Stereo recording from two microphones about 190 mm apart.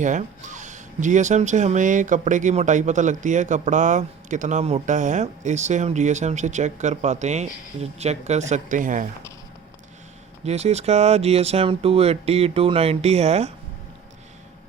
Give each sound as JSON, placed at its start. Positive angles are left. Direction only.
{"t": 0.0, "sound": "speech", "side_deg": -40}
{"t": 10.4, "sound": "speech", "side_deg": -35}